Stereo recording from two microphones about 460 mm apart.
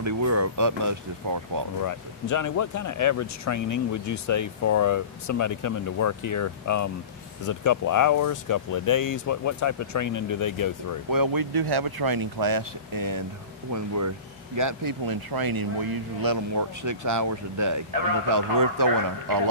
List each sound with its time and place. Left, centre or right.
0.0 s speech: right
1.8 s speech: left
11.1 s speech: right